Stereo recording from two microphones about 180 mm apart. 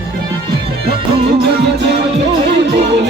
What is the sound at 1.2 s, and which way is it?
Music, 65° right (ahead or behind).